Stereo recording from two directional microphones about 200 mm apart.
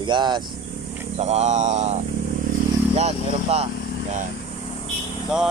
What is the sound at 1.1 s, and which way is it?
Mantra, 35° right (ahead or behind).